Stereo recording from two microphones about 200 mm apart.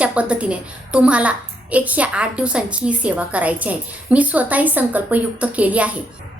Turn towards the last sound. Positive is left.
turn(degrees=-5)  # may be behind; listen again after turning